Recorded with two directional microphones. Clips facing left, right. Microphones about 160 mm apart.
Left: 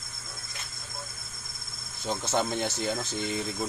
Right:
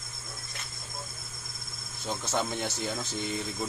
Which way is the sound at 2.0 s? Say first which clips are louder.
Left 3 dB; 20° left (ahead or behind).